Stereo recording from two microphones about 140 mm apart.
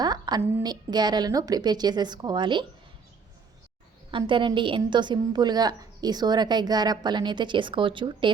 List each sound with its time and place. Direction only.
0.0 s a sound: 30° right (ahead or behind)
0.6 s a woman's voice: 30° right (ahead or behind)
4.3 s a woman's voice: 35° right (ahead or behind)